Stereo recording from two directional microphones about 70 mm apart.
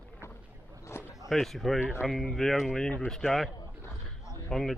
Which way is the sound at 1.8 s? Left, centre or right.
Right.